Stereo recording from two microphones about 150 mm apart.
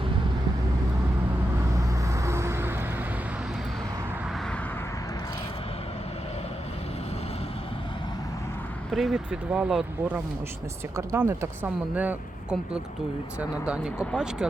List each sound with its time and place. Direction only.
1.7 s vehicle: 20° right (ahead or behind)
8.9 s speech: centre (ahead or behind)
10.9 s speech: 20° right (ahead or behind)